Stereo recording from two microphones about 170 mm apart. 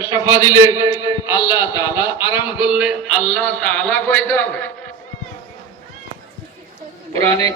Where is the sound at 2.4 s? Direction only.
5° right (ahead or behind); by 4.7 s 10° left (ahead or behind).